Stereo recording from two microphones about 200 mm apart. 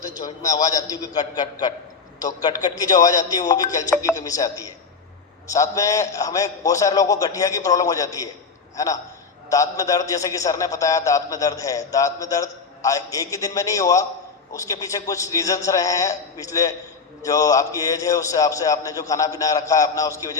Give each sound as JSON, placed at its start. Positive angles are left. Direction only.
{"t": 0.0, "sound": "a man's voice", "side_deg": 20}